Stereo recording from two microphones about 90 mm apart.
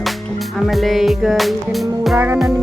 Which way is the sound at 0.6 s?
Centre (ahead or behind).